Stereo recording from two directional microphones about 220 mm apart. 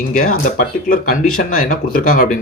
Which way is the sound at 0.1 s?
35° left (ahead or behind).